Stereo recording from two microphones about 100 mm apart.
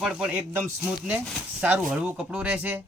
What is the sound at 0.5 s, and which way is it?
Speech, 20° right (ahead or behind).